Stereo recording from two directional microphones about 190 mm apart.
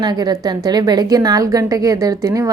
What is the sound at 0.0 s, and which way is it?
A woman's voice, 20° right (ahead or behind).